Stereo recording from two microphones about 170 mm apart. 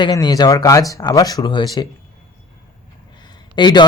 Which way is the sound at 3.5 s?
25° left (ahead or behind).